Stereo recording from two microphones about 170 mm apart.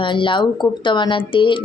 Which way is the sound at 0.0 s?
30° left (ahead or behind).